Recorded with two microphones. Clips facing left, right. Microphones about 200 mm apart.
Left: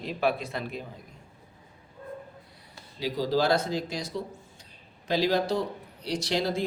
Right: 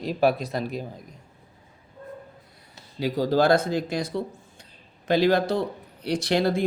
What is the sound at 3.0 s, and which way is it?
Speech, 55° right (ahead or behind).